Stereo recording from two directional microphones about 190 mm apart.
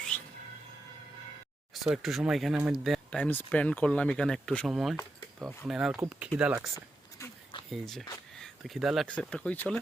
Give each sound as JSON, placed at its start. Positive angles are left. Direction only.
{"t": 1.7, "sound": "speech", "side_deg": 0}
{"t": 6.7, "sound": "a sound", "side_deg": 20}
{"t": 7.7, "sound": "speech", "side_deg": 0}